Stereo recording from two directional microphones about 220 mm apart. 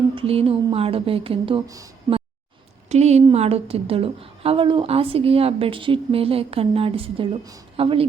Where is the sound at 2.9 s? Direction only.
30° right (ahead or behind).